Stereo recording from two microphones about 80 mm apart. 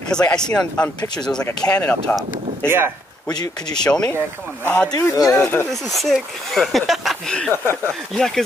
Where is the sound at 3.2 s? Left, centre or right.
Left.